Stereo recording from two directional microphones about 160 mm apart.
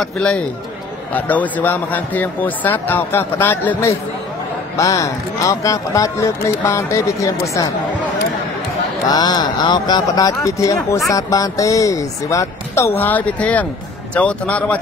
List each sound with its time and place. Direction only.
0.0 s a man's voice: 5° left (ahead or behind)
9.1 s a man's voice: 25° left (ahead or behind); by 14.8 s 10° left (ahead or behind)